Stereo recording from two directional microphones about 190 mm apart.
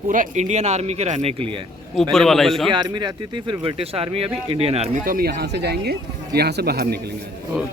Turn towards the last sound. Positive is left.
turn(degrees=-55)  # may be behind; listen again after turning